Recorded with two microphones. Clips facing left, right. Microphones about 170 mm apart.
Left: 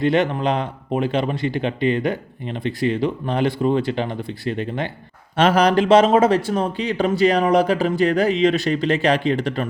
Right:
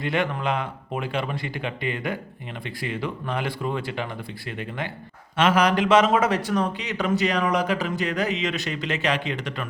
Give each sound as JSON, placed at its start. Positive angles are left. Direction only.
{"t": 0.0, "sound": "speech", "side_deg": 25}